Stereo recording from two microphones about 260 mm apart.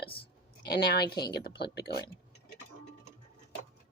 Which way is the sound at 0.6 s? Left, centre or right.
Left.